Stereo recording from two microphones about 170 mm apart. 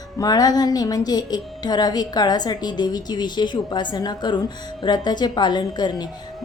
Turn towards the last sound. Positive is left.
turn(degrees=25)  # may be behind; listen again after turning